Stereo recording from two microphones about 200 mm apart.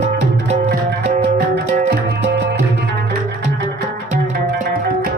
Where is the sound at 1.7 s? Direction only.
50° right (ahead or behind).